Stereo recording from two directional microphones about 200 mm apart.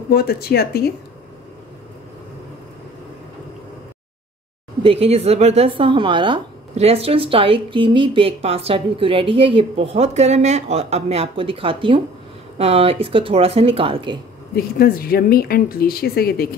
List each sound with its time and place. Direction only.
0.1 s speech: 50° left (ahead or behind)
4.8 s speech: 30° right (ahead or behind)
14.5 s speech: 50° left (ahead or behind)